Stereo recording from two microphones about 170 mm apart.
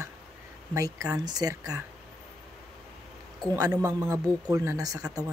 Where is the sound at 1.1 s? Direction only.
20° right (ahead or behind).